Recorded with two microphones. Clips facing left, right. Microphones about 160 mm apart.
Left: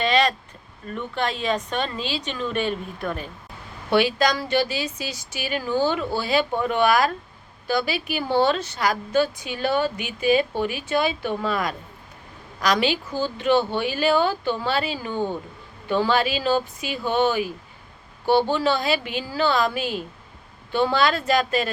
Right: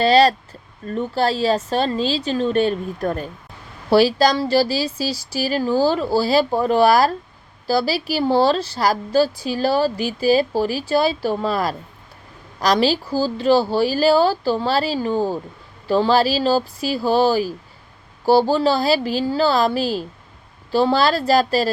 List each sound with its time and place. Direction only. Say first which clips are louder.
0.0 s a woman's voice: right 7 dB; 35° right (ahead or behind)